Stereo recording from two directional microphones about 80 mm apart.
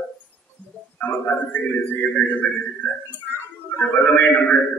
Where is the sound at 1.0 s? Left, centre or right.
Left.